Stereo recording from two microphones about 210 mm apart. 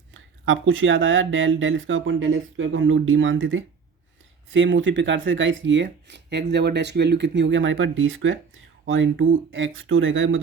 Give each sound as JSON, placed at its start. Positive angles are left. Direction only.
{"t": 0.1, "sound": "speech", "side_deg": -70}